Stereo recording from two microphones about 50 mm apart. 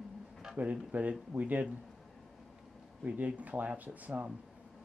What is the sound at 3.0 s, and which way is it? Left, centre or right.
Speech, right.